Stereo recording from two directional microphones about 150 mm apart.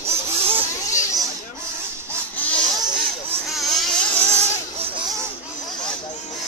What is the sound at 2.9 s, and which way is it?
Vehicle, 5° right (ahead or behind).